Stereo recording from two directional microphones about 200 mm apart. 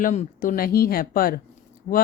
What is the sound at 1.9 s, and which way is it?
Speech, 35° left (ahead or behind).